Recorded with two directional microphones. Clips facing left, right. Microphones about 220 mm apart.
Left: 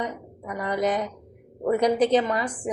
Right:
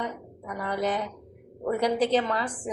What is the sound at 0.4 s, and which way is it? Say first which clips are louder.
A woman's voice: left 3 dB; 15° left (ahead or behind).